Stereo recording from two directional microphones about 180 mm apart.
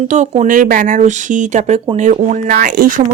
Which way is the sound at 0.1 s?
40° right (ahead or behind).